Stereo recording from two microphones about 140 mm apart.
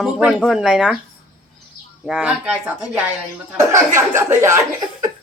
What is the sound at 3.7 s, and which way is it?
Speech, 20° right (ahead or behind).